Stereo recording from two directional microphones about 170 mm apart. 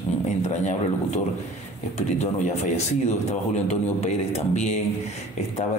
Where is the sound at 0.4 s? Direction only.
40° left (ahead or behind).